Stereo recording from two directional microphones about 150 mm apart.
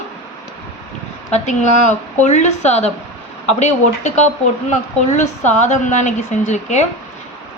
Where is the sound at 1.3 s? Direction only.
50° left (ahead or behind).